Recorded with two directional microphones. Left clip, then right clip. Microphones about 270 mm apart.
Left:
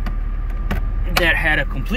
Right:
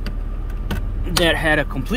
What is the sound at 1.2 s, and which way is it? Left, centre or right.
Speech, right.